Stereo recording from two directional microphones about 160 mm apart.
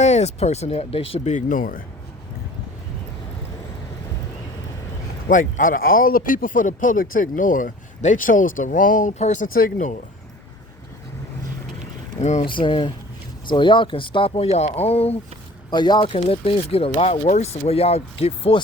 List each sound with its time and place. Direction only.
0.0 s speech: 45° left (ahead or behind)
5.3 s speech: 55° left (ahead or behind)
12.2 s speech: 45° left (ahead or behind)
12.5 s speech: 30° left (ahead or behind)
15.7 s speech: 30° left (ahead or behind)